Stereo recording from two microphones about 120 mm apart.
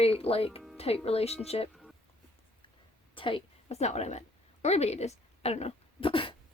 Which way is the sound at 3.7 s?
65° left (ahead or behind).